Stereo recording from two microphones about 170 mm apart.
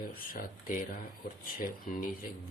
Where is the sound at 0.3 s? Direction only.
55° left (ahead or behind).